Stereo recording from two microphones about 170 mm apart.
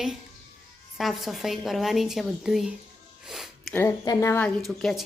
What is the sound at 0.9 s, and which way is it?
Speech, centre (ahead or behind).